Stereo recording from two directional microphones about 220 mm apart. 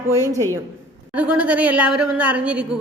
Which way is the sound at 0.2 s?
15° right (ahead or behind).